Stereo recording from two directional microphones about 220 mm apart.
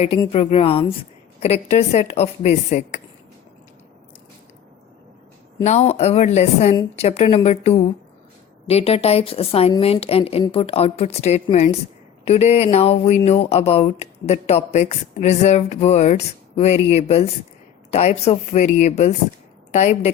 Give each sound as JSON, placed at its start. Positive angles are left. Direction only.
{"t": 0.3, "sound": "a woman's voice", "side_deg": 25}
{"t": 5.6, "sound": "a woman's voice", "side_deg": 30}